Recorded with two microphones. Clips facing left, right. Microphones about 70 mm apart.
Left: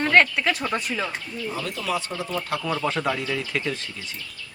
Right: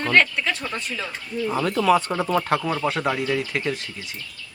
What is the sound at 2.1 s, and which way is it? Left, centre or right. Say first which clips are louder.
Speech: right 6 dB; right.